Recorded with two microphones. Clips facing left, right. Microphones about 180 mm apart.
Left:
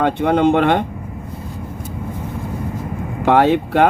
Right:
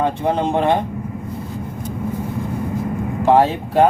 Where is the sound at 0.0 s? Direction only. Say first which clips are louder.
Left 4 dB; 70° left (ahead or behind).